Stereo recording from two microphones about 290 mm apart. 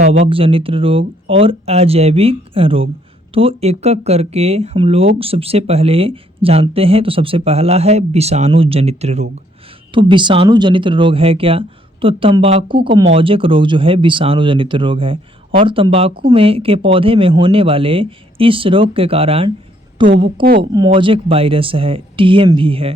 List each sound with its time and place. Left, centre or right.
0.0 s speech: right
0.3 s speech: centre
20.2 s speech: right
20.6 s speech: centre